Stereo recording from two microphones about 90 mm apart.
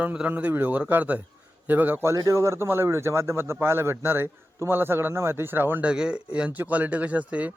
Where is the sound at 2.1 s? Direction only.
35° right (ahead or behind).